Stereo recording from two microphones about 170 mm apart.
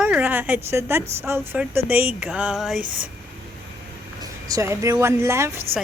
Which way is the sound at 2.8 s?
55° right (ahead or behind).